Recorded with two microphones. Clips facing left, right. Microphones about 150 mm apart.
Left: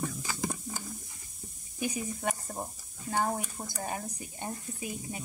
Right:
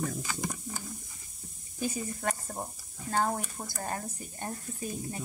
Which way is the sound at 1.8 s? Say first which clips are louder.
Even; 15° left (ahead or behind).